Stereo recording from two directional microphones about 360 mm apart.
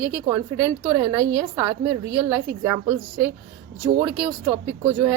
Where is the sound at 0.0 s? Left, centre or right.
Centre.